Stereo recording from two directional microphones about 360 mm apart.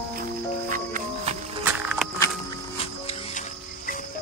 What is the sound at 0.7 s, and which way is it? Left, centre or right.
Music, right.